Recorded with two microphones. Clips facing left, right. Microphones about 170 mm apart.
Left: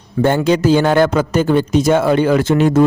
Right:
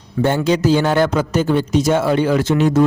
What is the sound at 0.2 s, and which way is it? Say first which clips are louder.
Speech: left 2 dB; 55° left (ahead or behind).